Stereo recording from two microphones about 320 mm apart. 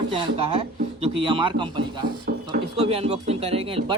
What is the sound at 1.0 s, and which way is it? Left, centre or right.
Speech, centre.